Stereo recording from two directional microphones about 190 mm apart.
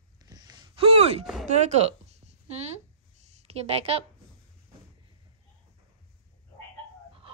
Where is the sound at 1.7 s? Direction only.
35° right (ahead or behind).